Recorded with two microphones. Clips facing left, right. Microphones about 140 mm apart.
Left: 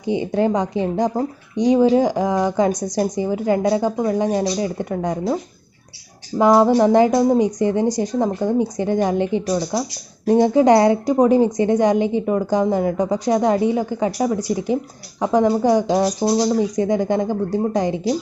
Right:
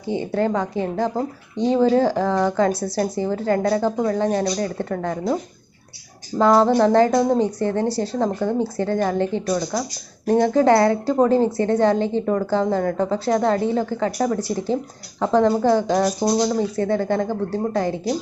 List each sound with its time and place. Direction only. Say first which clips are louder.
0.0 s speech: left 3 dB; 15° left (ahead or behind)
6.4 s speech: left 2 dB; 15° left (ahead or behind)